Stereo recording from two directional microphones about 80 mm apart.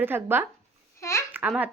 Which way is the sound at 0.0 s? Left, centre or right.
Right.